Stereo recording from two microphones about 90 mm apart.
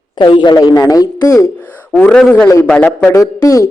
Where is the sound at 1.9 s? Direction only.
15° left (ahead or behind).